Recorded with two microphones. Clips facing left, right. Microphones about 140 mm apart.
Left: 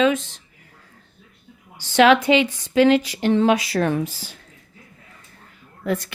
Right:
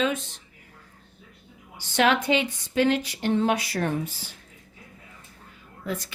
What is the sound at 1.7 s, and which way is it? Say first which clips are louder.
A woman's voice: left 7 dB; 90° left.